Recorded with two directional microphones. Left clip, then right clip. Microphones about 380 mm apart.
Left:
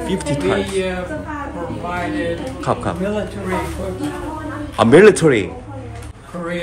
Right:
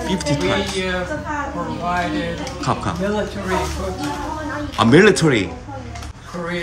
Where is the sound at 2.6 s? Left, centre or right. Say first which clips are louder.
Left 1 dB; centre.